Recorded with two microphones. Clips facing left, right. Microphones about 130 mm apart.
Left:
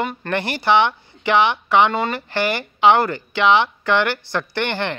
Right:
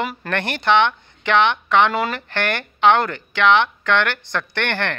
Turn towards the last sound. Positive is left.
turn(degrees=10)  # may be behind; listen again after turning